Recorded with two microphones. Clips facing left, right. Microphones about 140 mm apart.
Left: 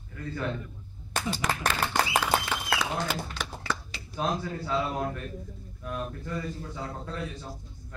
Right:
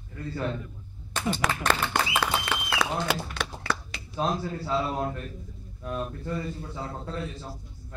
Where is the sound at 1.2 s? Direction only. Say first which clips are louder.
Right 4 dB; 65° right (ahead or behind).